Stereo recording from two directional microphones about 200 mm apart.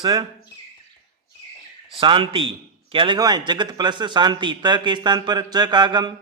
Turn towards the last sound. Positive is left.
turn(degrees=-20)  # may be behind; listen again after turning